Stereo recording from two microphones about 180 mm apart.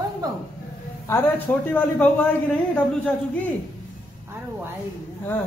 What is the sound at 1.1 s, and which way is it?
Speech, 10° left (ahead or behind).